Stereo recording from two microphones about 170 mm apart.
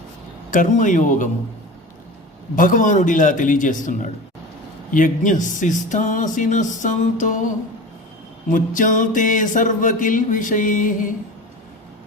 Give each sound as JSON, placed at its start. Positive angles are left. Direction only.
{"t": 0.5, "sound": "music", "side_deg": 50}
{"t": 2.6, "sound": "music", "side_deg": 50}
{"t": 8.5, "sound": "music", "side_deg": 50}